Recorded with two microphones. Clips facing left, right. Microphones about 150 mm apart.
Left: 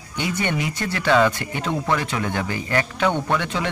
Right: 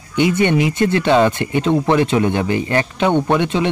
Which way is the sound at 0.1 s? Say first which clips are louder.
Right 10 dB; 20° right (ahead or behind).